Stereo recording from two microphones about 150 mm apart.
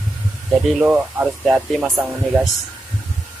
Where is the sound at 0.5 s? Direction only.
5° right (ahead or behind).